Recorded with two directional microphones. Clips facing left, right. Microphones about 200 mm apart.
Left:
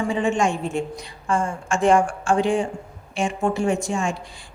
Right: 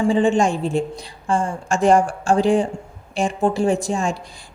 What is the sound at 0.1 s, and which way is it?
A woman's voice, 30° right (ahead or behind).